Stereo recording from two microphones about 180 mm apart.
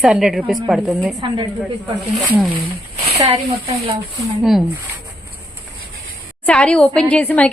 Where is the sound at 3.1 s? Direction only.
35° right (ahead or behind).